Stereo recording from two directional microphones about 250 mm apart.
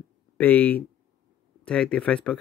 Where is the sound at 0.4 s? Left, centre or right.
Centre.